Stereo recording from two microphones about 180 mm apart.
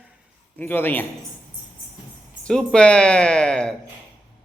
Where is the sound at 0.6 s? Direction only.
10° left (ahead or behind).